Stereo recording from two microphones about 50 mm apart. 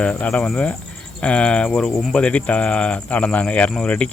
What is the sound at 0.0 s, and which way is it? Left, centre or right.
Speech, left.